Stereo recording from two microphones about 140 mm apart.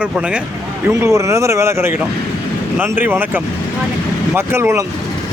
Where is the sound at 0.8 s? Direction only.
20° right (ahead or behind).